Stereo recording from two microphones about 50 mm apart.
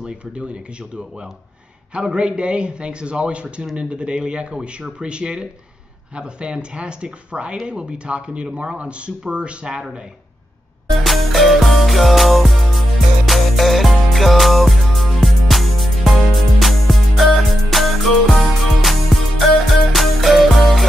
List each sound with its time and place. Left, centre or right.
2.0 s speech: centre
10.9 s music: centre